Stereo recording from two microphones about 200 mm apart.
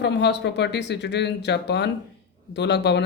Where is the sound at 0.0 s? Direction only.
60° left (ahead or behind).